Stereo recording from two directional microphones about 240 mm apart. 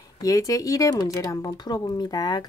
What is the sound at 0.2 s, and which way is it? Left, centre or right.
Speech, centre.